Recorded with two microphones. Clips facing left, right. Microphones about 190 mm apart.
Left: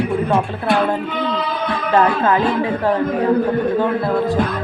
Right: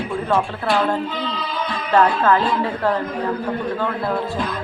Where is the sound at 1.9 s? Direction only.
15° left (ahead or behind).